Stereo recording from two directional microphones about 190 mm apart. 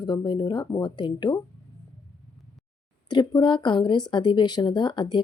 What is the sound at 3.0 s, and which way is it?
A woman's voice, 20° left (ahead or behind).